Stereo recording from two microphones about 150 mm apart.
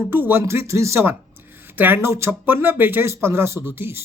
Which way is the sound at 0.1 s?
15° right (ahead or behind).